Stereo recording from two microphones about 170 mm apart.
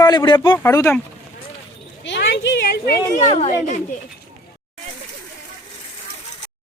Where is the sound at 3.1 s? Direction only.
40° left (ahead or behind).